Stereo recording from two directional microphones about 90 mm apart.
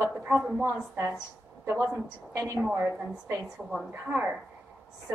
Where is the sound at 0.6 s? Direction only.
30° right (ahead or behind).